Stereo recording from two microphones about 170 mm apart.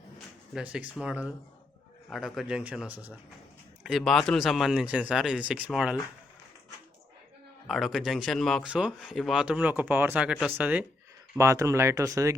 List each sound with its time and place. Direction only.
0.5 s speech: 5° right (ahead or behind)
7.7 s speech: centre (ahead or behind); by 12.3 s 20° right (ahead or behind)